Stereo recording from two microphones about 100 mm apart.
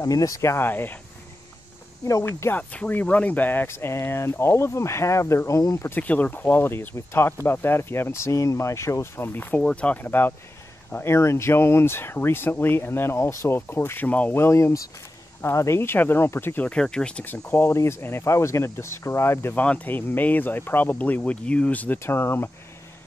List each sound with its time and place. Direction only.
0.0 s speech: 35° left (ahead or behind); by 0.9 s 20° left (ahead or behind)
2.2 s speech: 20° left (ahead or behind); by 5.9 s 35° left (ahead or behind)
5.9 s speech: 15° left (ahead or behind)
19.6 s speech: 15° left (ahead or behind)